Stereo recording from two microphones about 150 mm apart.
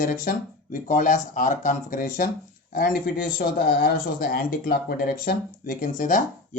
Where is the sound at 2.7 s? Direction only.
80° left.